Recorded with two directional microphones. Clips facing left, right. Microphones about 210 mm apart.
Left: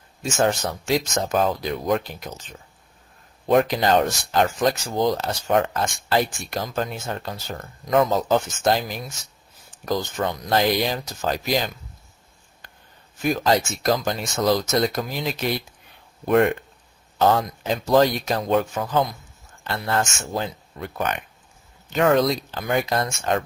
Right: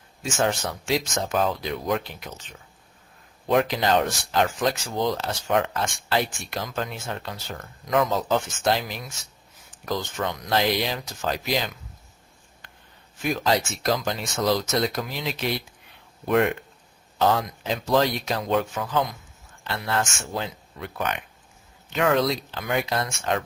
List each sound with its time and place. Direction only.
0.2 s speech: 40° left (ahead or behind)
13.2 s speech: 45° left (ahead or behind)